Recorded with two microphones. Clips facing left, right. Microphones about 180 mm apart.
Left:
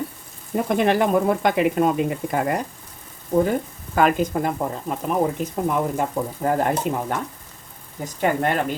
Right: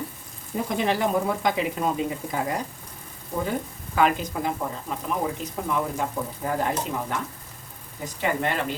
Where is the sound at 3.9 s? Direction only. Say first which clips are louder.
Left 4 dB; 50° left (ahead or behind).